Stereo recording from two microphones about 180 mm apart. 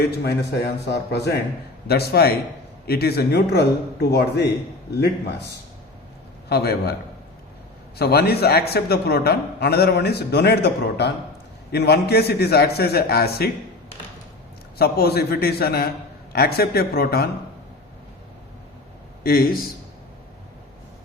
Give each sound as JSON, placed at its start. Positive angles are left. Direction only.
{"t": 0.0, "sound": "a man's voice", "side_deg": 65}
{"t": 6.5, "sound": "a man's voice", "side_deg": 60}
{"t": 7.9, "sound": "a man's voice", "side_deg": 65}
{"t": 14.8, "sound": "a man's voice", "side_deg": 60}
{"t": 19.2, "sound": "a man's voice", "side_deg": 55}